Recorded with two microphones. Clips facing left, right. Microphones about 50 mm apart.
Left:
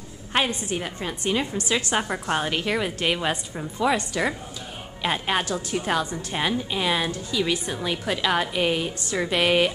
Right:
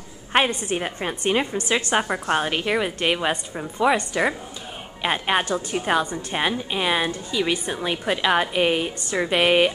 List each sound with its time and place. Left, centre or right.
0.3 s a woman's voice: right
1.5 s a woman's voice: centre